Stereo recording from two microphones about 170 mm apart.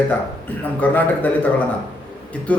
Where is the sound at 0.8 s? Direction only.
10° left (ahead or behind).